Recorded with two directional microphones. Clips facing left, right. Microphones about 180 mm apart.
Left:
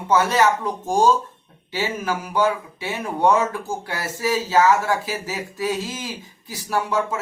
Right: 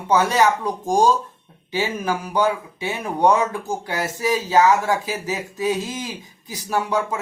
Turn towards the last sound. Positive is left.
turn(degrees=-15)  # may be behind; listen again after turning